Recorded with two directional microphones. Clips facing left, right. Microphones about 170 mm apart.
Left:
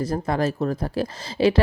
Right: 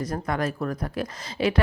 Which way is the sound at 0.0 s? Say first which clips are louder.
Left 4 dB; 30° left (ahead or behind).